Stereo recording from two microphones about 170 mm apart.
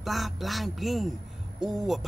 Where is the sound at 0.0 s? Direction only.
Centre (ahead or behind).